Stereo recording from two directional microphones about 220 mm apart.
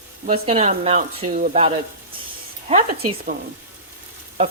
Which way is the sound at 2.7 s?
25° right (ahead or behind).